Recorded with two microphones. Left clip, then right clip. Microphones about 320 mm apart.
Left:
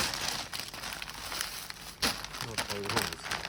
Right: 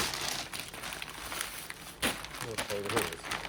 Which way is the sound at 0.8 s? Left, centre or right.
Left.